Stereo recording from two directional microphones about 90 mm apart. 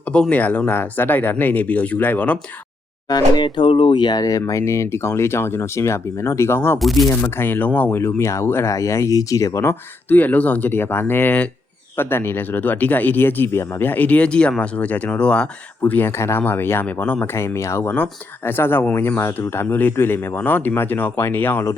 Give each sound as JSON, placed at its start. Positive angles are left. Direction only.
{"t": 0.0, "sound": "speech", "side_deg": 15}
{"t": 3.1, "sound": "speech", "side_deg": 50}
{"t": 6.7, "sound": "speech", "side_deg": 0}
{"t": 7.1, "sound": "speech", "side_deg": 25}
{"t": 10.1, "sound": "speech", "side_deg": 20}
{"t": 15.8, "sound": "speech", "side_deg": 20}